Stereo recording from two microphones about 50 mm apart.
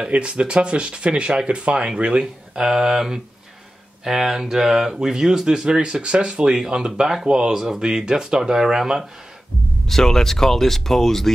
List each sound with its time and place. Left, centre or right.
0.0 s speech: right
9.8 s speech: centre